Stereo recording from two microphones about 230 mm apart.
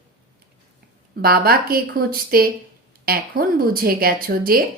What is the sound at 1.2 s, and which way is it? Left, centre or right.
Speech, right.